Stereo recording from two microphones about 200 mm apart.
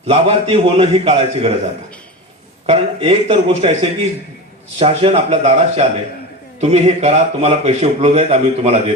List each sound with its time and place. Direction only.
0.1 s a man's voice: 30° right (ahead or behind)
2.6 s a man's voice: 30° right (ahead or behind)
4.8 s a man's voice: 30° right (ahead or behind)